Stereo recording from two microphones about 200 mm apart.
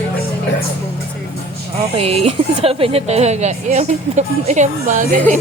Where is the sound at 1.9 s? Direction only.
30° right (ahead or behind).